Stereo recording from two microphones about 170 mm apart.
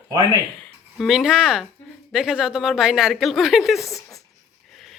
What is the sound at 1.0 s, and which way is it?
Speech, centre (ahead or behind).